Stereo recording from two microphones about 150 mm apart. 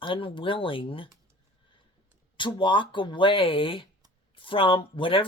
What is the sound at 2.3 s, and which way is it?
Speech, 30° left (ahead or behind).